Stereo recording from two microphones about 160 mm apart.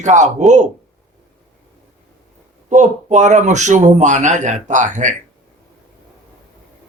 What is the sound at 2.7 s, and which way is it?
Speech, 50° right (ahead or behind).